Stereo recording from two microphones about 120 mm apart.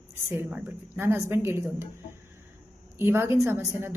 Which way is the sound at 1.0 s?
20° right (ahead or behind).